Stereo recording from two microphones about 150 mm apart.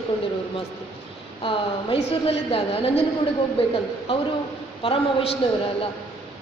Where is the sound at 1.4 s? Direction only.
35° left (ahead or behind).